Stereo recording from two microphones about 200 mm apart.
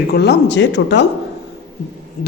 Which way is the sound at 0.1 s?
55° left (ahead or behind).